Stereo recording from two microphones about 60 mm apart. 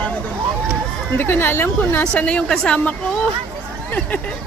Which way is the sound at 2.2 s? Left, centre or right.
Centre.